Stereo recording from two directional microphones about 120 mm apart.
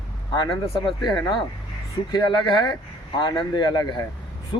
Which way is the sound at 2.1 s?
35° left (ahead or behind).